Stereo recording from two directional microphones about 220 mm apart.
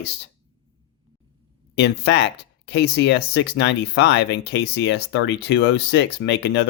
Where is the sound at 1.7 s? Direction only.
50° left (ahead or behind).